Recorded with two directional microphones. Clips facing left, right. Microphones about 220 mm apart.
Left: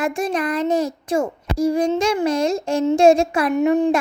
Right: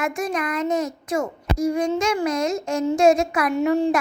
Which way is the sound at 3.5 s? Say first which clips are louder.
Left 3 dB; 20° left (ahead or behind).